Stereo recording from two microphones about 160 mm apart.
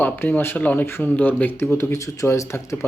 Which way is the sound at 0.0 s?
10° left (ahead or behind).